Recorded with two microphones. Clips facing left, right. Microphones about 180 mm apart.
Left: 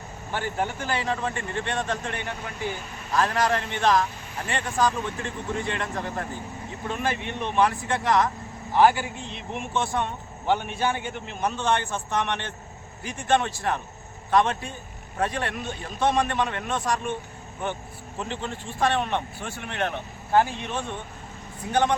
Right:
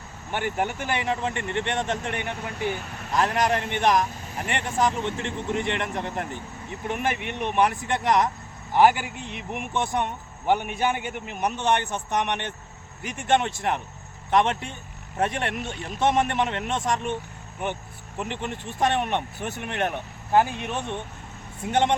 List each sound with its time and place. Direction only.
0.3 s speech: 20° right (ahead or behind)
18.2 s speech: 20° right (ahead or behind)